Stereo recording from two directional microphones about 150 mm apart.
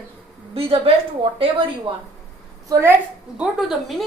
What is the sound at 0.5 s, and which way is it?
A woman's voice, 40° right (ahead or behind).